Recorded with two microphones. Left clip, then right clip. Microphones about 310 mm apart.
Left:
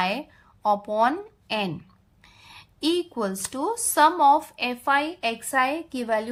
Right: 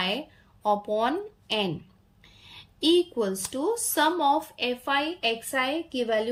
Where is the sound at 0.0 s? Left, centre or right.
Centre.